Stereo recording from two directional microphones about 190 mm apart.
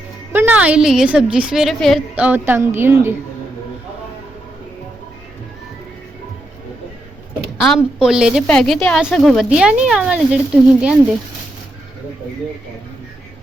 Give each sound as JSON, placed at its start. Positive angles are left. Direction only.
{"t": 0.3, "sound": "a woman's voice", "side_deg": -10}
{"t": 7.6, "sound": "speech", "side_deg": 0}